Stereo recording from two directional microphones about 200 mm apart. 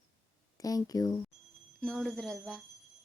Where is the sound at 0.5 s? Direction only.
20° left (ahead or behind).